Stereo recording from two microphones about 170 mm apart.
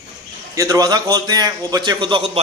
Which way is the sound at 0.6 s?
20° right (ahead or behind).